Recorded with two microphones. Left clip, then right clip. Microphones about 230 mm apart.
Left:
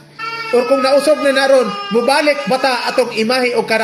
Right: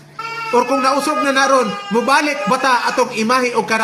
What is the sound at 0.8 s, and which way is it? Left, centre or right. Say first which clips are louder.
A man's voice: left 4 dB; centre.